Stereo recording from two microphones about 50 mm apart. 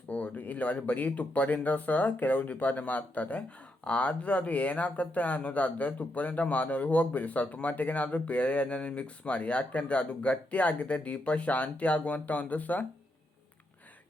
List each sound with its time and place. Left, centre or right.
0.1 s speech: left